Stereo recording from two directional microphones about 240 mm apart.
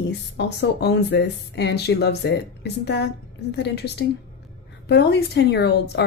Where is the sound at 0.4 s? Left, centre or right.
Left.